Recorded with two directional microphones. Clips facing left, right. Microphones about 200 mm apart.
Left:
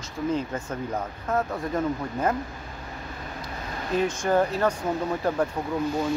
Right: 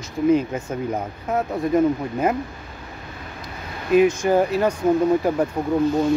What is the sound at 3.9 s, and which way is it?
Speech, 10° right (ahead or behind).